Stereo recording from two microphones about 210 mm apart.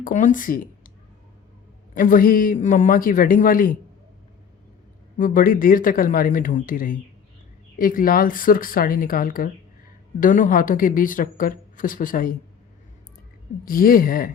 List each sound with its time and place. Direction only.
0.0 s a woman's voice: 40° left (ahead or behind)
2.0 s a woman's voice: 40° left (ahead or behind)
5.1 s a woman's voice: 40° left (ahead or behind)
13.7 s speech: 45° left (ahead or behind)